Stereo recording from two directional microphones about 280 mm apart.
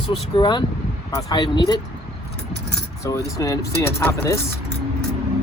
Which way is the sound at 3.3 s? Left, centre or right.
Centre.